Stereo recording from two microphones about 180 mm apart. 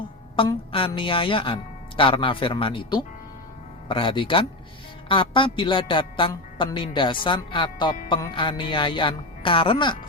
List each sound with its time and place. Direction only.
0.3 s speech: 30° left (ahead or behind)